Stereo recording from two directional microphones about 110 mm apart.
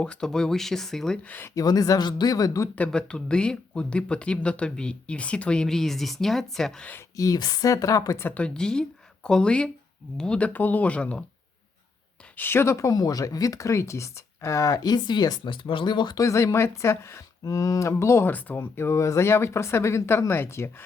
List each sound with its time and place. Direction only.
0.0 s speech: 10° left (ahead or behind)
1.5 s speech: 35° left (ahead or behind)
2.7 s speech: 10° left (ahead or behind)
7.2 s speech: 35° left (ahead or behind)
8.2 s speech: 15° left (ahead or behind)
12.4 s speech: 20° left (ahead or behind); by 16.2 s 40° left (ahead or behind)
16.2 s speech: 25° left (ahead or behind)